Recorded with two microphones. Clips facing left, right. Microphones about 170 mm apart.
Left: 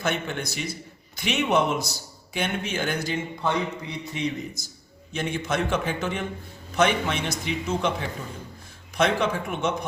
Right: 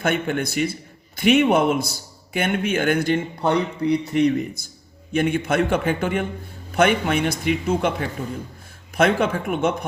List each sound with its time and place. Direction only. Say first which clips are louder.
0.0 s a man's voice: right 6 dB; 55° right (ahead or behind)
9.0 s speech: right 4 dB; 55° right (ahead or behind)